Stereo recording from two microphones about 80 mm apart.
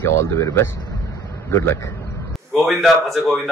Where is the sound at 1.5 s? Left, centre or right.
Left.